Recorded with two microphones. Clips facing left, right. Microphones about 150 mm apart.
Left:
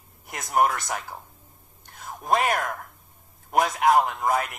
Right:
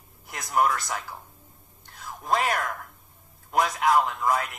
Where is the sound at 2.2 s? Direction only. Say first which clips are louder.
Left 2 dB; 25° left (ahead or behind).